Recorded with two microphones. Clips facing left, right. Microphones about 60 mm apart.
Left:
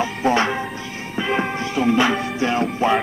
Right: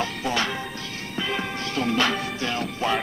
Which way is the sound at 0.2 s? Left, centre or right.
Left.